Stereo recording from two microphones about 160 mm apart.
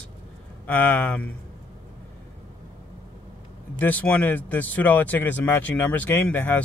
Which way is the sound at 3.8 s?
10° left (ahead or behind).